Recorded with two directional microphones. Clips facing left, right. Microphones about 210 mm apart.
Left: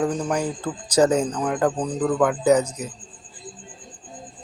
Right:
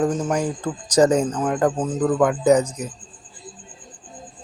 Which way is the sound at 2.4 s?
10° left (ahead or behind).